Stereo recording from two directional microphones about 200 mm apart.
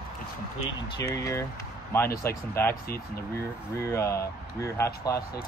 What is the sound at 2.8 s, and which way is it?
Speech, 50° left (ahead or behind).